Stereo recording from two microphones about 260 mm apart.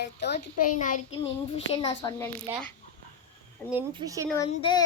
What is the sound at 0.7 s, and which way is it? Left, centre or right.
A child's voice, left.